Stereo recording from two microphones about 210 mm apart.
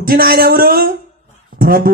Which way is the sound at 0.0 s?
45° right (ahead or behind).